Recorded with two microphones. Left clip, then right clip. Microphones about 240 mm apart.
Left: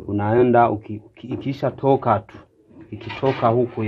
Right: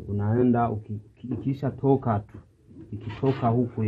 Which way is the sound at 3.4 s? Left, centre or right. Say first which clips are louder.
Left 9 dB; left.